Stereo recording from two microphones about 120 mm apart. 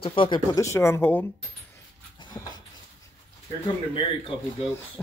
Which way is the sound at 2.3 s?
20° left (ahead or behind).